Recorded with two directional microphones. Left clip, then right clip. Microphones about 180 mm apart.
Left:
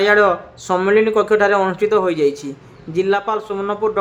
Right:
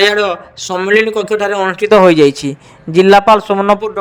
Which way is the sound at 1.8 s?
40° right (ahead or behind).